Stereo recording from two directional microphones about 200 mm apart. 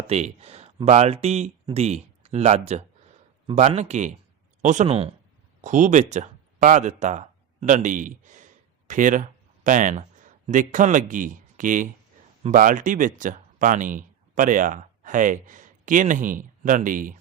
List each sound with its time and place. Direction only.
0.1 s speech: 30° right (ahead or behind)